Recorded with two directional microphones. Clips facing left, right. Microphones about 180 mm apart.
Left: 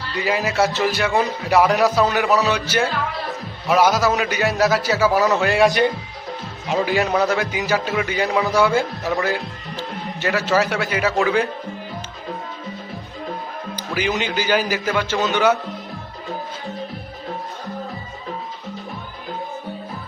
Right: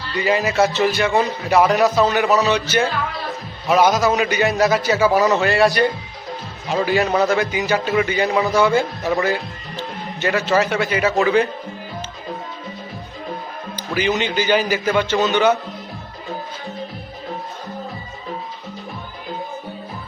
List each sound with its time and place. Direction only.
0.3 s speech: centre (ahead or behind)
5.5 s a man's voice: 15° left (ahead or behind)
6.9 s speech: centre (ahead or behind)
13.9 s a man's voice: 10° left (ahead or behind)